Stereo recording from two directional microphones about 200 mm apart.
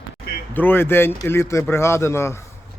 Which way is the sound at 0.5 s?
10° left (ahead or behind).